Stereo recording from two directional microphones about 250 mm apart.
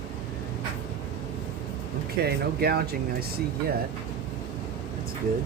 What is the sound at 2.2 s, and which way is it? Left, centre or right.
Speech, right.